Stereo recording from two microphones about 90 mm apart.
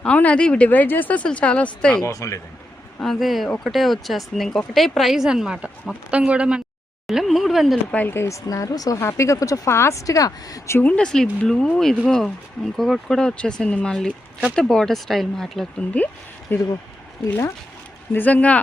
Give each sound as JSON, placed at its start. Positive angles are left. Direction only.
{"t": 0.0, "sound": "speech", "side_deg": 15}
{"t": 2.0, "sound": "speech", "side_deg": 35}
{"t": 3.0, "sound": "speech", "side_deg": 0}
{"t": 7.9, "sound": "speech", "side_deg": 20}
{"t": 10.8, "sound": "speech", "side_deg": 15}
{"t": 16.5, "sound": "speech", "side_deg": 25}
{"t": 18.1, "sound": "speech", "side_deg": 20}